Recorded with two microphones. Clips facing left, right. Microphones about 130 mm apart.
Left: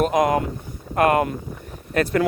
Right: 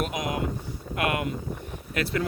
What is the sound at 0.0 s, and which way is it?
Speech, 50° left (ahead or behind).